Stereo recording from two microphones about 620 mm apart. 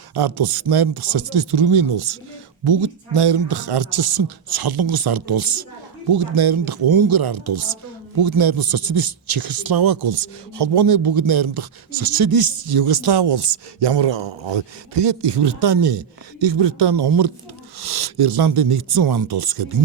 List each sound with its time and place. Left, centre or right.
0.1 s a man's voice: right